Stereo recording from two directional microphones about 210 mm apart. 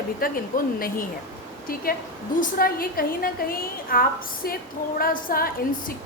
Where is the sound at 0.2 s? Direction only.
40° left (ahead or behind).